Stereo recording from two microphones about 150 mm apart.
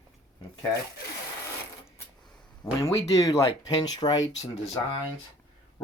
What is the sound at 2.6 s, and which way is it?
Speech, 25° left (ahead or behind).